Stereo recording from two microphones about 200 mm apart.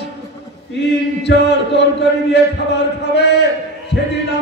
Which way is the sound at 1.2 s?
60° left (ahead or behind).